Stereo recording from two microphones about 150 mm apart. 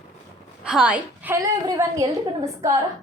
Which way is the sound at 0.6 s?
5° right (ahead or behind).